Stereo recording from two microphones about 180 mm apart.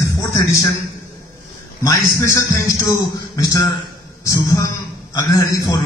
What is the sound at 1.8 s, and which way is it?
A man's voice, 15° left (ahead or behind).